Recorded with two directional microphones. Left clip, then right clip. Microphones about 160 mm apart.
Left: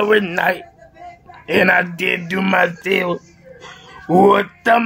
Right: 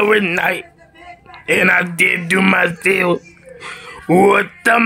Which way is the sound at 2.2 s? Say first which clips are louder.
Right 2 dB; 30° right (ahead or behind).